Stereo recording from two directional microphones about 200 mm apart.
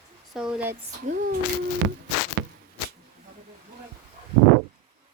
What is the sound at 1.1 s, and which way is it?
Speech, 50° right (ahead or behind).